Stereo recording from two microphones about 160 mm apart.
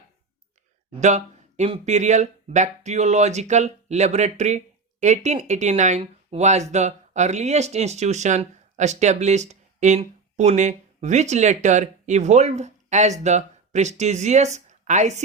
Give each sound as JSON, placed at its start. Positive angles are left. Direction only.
{"t": 0.9, "sound": "speech", "side_deg": -45}